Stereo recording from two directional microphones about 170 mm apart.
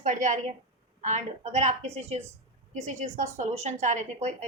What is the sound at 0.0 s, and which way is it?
A woman's voice, 45° right (ahead or behind).